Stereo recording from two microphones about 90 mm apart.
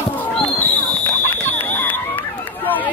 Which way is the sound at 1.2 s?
20° left (ahead or behind).